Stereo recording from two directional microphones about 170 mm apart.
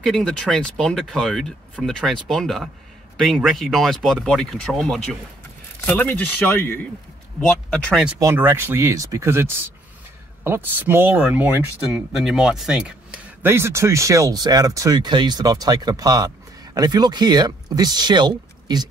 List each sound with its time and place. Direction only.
0.0 s speech: 5° left (ahead or behind)
8.2 s speech: 15° right (ahead or behind)